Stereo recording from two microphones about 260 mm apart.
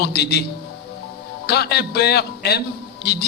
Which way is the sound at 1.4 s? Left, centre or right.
Left.